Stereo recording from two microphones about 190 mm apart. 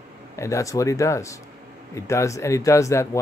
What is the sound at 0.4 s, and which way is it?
Speech, 15° left (ahead or behind).